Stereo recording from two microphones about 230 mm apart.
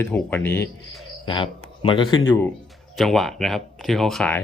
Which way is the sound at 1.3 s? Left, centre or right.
Left.